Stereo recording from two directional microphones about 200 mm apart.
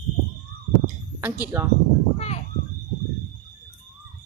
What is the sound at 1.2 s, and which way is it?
Speech, 10° right (ahead or behind).